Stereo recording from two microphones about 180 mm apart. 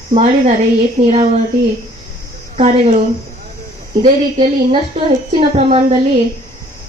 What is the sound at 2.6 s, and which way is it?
Speech, 35° right (ahead or behind).